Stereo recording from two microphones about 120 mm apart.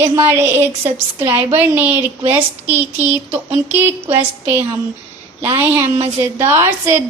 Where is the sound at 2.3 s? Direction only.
15° right (ahead or behind).